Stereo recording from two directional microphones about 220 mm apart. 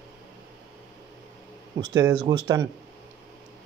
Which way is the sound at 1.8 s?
15° right (ahead or behind).